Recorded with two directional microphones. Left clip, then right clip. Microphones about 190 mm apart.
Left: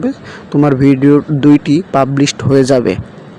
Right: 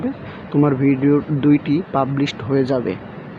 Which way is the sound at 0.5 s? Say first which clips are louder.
Left 6 dB; 30° left (ahead or behind).